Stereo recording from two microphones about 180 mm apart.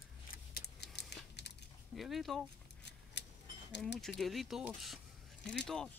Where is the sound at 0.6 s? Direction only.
65° left (ahead or behind).